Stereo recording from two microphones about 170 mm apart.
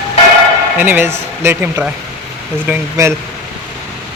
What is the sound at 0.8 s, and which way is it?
Speech, 10° right (ahead or behind).